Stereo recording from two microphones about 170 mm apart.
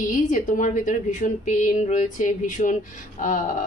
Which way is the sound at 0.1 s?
50° left (ahead or behind).